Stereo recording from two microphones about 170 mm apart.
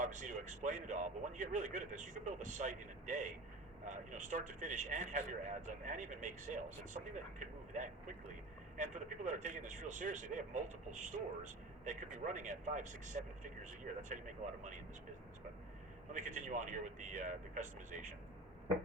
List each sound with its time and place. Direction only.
0.0 s speech: 45° right (ahead or behind)
16.1 s speech: 45° right (ahead or behind)